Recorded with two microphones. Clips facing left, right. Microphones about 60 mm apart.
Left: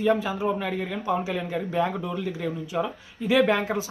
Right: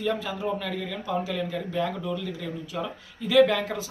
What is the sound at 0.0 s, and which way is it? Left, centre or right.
Speech, left.